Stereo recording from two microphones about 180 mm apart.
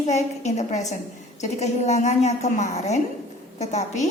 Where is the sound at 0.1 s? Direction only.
40° left (ahead or behind).